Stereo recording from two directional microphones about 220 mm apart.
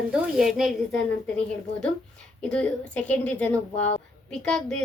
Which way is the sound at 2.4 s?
5° left (ahead or behind).